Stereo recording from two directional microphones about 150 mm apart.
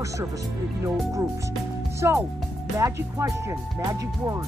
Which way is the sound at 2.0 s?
20° right (ahead or behind).